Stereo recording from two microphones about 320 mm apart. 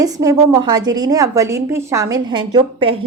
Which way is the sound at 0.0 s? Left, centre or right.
Centre.